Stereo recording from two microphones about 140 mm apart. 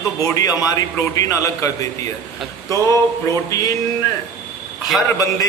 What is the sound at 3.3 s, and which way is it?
Speech, 25° left (ahead or behind).